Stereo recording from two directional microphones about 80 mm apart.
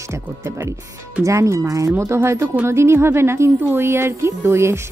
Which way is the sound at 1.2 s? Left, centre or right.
Right.